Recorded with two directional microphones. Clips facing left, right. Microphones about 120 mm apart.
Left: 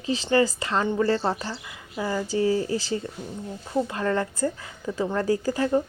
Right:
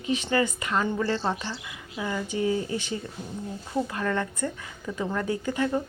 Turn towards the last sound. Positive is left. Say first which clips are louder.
# left 3 dB
turn(degrees=35)  # may be behind; listen again after turning